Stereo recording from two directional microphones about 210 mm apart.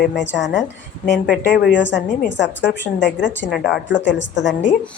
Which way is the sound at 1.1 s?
50° left (ahead or behind).